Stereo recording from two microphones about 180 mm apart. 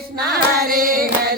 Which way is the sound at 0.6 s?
55° right (ahead or behind).